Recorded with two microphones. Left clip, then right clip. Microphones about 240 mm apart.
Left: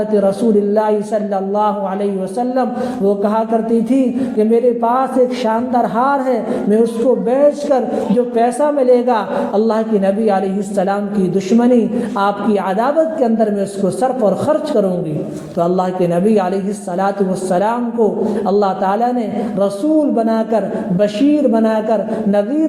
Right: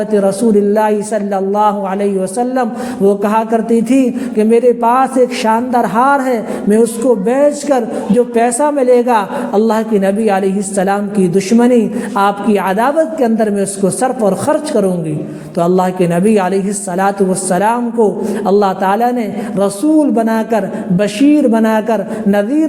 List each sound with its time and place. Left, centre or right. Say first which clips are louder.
0.1 s a man's voice: right 3 dB; right